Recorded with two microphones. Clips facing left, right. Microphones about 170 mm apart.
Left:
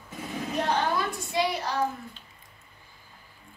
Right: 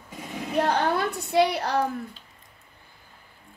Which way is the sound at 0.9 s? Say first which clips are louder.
Right 6 dB; 65° right (ahead or behind).